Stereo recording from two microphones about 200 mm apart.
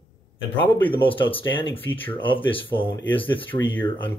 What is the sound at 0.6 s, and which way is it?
Speech, 25° left (ahead or behind).